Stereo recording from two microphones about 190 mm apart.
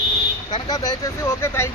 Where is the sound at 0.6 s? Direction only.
20° left (ahead or behind).